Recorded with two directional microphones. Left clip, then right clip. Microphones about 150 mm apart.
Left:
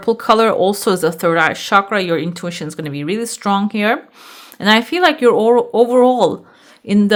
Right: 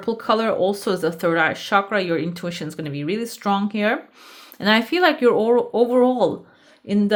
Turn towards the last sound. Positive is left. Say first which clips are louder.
# left 5 dB
turn(degrees=45)  # may be behind; listen again after turning